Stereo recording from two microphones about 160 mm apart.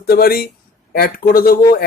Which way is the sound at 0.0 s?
70° left (ahead or behind).